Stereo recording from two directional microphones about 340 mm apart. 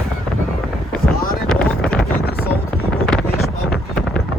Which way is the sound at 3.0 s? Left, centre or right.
Centre.